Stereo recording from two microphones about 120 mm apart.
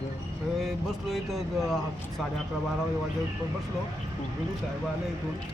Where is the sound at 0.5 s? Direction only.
Centre (ahead or behind).